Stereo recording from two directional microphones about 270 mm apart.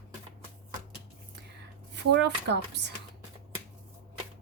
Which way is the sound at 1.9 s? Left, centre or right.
Right.